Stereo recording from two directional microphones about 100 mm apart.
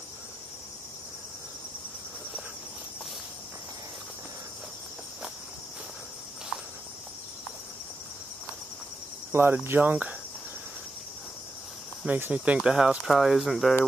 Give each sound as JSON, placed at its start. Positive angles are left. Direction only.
{"t": 9.3, "sound": "cricket", "side_deg": -20}
{"t": 12.1, "sound": "speech", "side_deg": -15}